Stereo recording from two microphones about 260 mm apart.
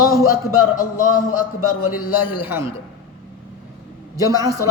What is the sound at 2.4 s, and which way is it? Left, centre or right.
Speech, centre.